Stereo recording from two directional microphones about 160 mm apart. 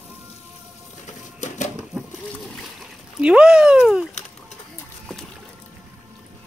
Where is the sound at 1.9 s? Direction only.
Centre (ahead or behind).